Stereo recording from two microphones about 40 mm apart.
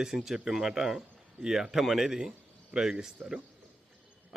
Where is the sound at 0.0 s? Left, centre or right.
Centre.